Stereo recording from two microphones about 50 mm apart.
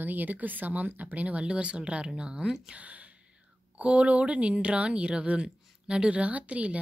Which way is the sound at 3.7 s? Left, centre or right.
Right.